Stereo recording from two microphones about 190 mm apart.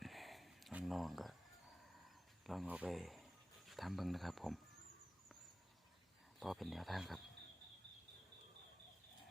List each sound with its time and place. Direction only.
0.0 s a sound: centre (ahead or behind)
2.5 s speech: 5° right (ahead or behind)
6.4 s speech: centre (ahead or behind)